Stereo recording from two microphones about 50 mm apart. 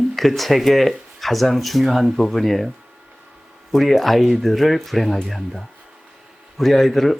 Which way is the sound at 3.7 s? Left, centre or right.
Centre.